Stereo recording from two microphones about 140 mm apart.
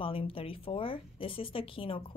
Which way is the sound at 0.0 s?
40° left (ahead or behind).